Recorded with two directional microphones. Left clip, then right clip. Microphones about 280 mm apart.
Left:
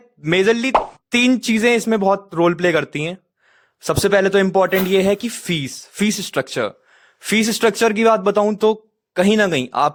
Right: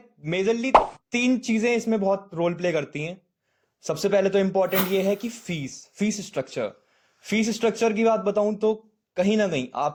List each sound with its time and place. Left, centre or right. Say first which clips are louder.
0.2 s speech: left 9 dB; left
0.7 s speech: even; centre
1.1 s speech: left 9 dB; left